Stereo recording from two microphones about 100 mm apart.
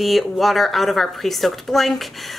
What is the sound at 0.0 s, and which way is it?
Speech, centre (ahead or behind).